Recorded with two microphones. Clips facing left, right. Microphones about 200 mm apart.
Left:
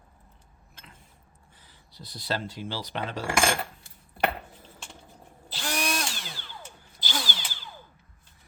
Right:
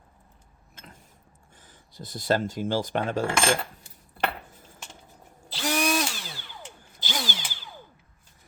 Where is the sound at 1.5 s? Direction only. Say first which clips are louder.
Right 5 dB; 50° right (ahead or behind).